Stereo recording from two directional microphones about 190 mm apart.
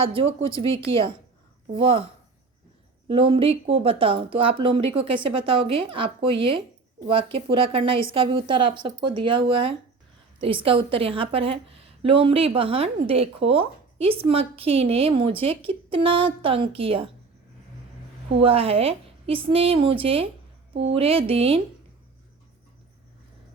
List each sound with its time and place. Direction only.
0.0 s a woman's voice: 30° right (ahead or behind)
3.1 s a woman's voice: 30° right (ahead or behind)
18.3 s a woman's voice: 30° right (ahead or behind)